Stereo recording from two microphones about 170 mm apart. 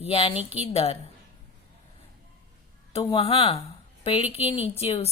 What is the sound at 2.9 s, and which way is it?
A woman's voice, 35° left (ahead or behind).